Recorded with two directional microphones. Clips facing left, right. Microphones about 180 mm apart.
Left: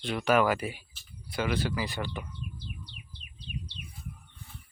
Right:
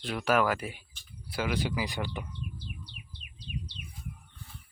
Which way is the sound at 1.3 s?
10° right (ahead or behind).